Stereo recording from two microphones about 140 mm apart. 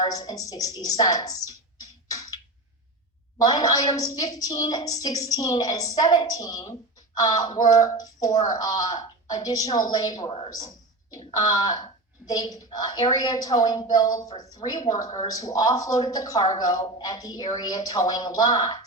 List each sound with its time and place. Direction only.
0.0 s a woman's voice: 25° left (ahead or behind)
0.8 s a sound: 25° left (ahead or behind)
3.3 s a woman's voice: 25° left (ahead or behind)
10.2 s a woman's voice: 40° left (ahead or behind)
10.5 s a woman's voice: 25° left (ahead or behind)